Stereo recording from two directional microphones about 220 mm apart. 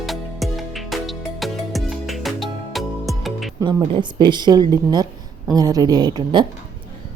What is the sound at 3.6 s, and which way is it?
Speech, 20° right (ahead or behind).